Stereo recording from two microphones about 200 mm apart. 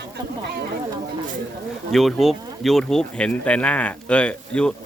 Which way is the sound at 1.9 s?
Centre (ahead or behind).